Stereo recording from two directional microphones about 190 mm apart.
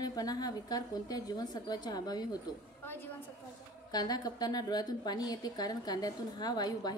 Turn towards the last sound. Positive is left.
turn(degrees=20)  # may be behind; listen again after turning